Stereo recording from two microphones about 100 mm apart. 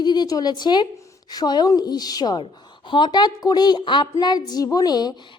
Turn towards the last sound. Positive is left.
turn(degrees=40)  # may be behind; listen again after turning